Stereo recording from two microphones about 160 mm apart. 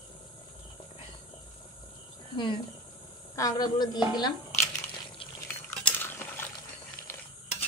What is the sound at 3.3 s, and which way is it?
Speech, 20° left (ahead or behind).